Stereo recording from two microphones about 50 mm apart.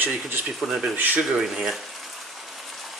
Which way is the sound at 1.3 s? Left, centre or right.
Centre.